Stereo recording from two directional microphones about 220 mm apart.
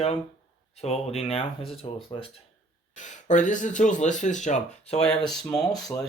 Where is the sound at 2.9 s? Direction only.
35° left (ahead or behind).